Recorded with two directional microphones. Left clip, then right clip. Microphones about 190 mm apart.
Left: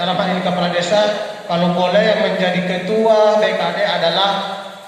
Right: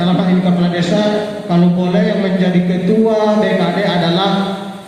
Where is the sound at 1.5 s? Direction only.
25° left (ahead or behind).